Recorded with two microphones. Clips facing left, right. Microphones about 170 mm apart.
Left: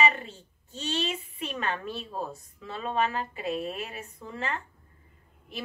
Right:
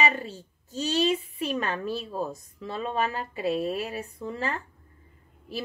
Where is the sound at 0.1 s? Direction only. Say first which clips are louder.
Right 5 dB; 35° right (ahead or behind).